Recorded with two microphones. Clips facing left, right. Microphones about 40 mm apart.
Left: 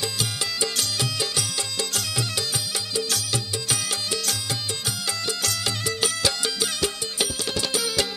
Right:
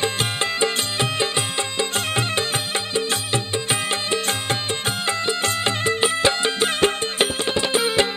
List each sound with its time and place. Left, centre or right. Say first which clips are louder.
0.0 s music: right 6 dB; right